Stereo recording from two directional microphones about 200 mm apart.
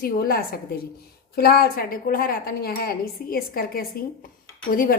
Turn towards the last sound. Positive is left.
turn(degrees=45)  # may be behind; listen again after turning